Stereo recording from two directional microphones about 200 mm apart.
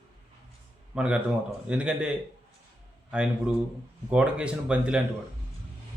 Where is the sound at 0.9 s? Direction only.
5° right (ahead or behind).